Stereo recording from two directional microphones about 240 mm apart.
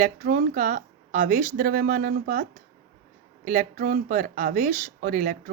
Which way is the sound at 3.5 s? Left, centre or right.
Right.